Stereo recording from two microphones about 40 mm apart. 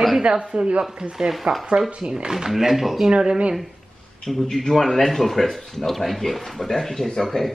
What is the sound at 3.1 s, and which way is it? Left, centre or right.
Speech, right.